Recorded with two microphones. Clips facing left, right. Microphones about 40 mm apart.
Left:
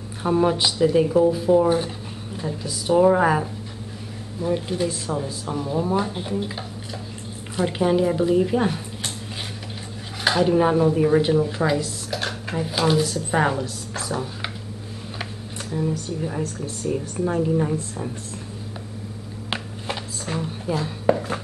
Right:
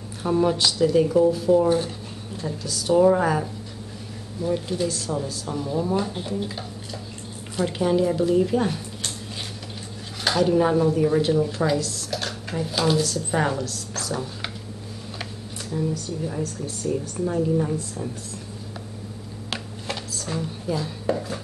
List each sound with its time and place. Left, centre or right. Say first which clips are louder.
0.2 s a woman's voice: left 1 dB; centre
10.2 s speech: left 1 dB; centre
14.1 s speech: left 2 dB; centre
16.3 s a woman's voice: left 1 dB; centre
19.5 s a sound: left 2 dB; left
21.1 s a sound: left 5 dB; left